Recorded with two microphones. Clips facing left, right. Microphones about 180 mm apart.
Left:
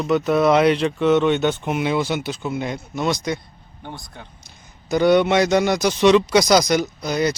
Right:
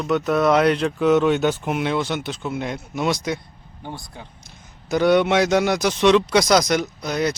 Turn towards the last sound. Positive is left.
turn(degrees=0)  # may be behind; listen again after turning